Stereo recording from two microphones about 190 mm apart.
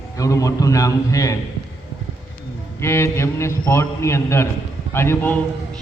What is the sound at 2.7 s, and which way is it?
A man's voice, 15° left (ahead or behind).